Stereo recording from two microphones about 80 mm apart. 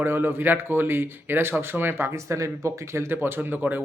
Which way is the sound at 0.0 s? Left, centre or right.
Right.